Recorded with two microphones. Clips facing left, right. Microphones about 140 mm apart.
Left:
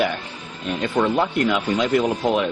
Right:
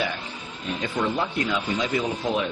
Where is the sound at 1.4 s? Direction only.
65° left (ahead or behind).